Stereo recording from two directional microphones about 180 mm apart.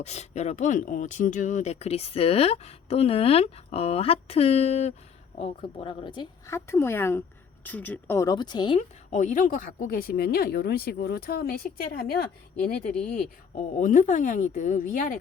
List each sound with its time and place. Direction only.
0.0 s speech: 40° left (ahead or behind)
6.5 s speech: 15° left (ahead or behind)
9.0 s speech: 45° left (ahead or behind)
12.9 s speech: 5° left (ahead or behind)
13.6 s a woman's voice: 45° left (ahead or behind)